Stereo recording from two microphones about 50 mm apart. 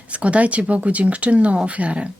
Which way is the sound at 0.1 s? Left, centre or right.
Right.